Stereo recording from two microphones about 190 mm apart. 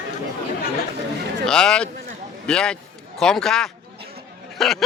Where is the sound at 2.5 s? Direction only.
5° left (ahead or behind).